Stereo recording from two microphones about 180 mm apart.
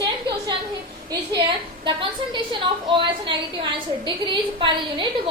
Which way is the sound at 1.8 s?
25° right (ahead or behind).